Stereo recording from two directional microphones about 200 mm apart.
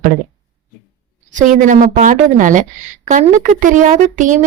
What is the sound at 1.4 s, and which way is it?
Speech, 40° right (ahead or behind).